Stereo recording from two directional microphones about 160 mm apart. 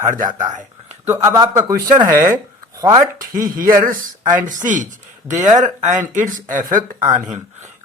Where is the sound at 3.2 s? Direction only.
60° right (ahead or behind).